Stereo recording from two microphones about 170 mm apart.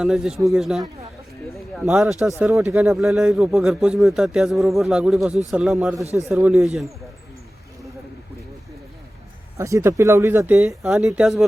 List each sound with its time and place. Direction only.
0.0 s speech: centre (ahead or behind)
9.6 s speech: 15° right (ahead or behind)
10.8 s speech: centre (ahead or behind)